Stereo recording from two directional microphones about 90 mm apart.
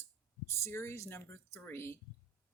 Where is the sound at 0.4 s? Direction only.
30° left (ahead or behind).